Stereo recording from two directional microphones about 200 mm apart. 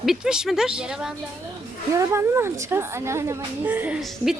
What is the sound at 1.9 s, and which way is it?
A woman's voice, 15° right (ahead or behind).